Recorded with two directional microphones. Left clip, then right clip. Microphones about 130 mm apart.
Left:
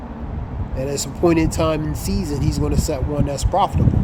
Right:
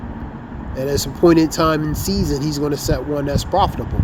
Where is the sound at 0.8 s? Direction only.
15° right (ahead or behind).